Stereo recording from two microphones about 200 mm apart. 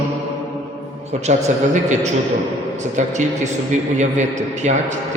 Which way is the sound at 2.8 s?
35° right (ahead or behind).